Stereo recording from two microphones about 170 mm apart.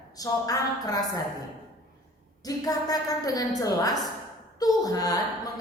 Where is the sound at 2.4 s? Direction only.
20° left (ahead or behind).